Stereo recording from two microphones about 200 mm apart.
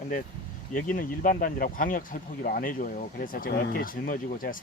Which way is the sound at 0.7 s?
40° left (ahead or behind).